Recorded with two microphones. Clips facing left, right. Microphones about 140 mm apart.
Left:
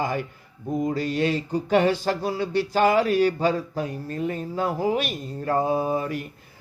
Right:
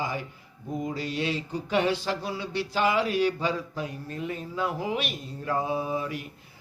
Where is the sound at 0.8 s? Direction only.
45° left (ahead or behind).